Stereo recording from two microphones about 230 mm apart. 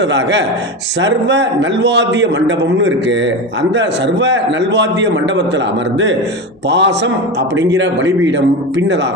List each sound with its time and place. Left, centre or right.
0.0 s a man's voice: right